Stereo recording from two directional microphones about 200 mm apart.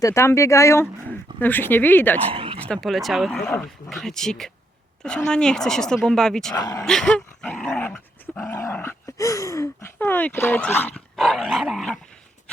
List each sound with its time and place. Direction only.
0.0 s dog: 15° left (ahead or behind)
2.3 s dog: 25° right (ahead or behind)
2.6 s speech: 5° left (ahead or behind)
3.4 s dog: 10° left (ahead or behind)
3.8 s speech: centre (ahead or behind)
6.5 s dog: 15° left (ahead or behind)
6.8 s dog: 5° left (ahead or behind)